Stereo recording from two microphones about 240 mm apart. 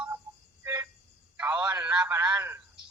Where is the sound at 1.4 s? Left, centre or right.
Centre.